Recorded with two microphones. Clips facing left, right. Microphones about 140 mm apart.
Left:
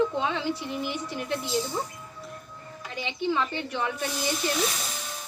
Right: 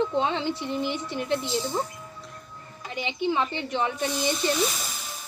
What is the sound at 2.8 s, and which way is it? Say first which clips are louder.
A woman's voice: right 2 dB; 20° right (ahead or behind).